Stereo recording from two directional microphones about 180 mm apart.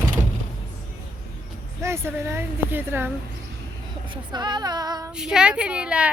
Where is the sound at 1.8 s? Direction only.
15° right (ahead or behind).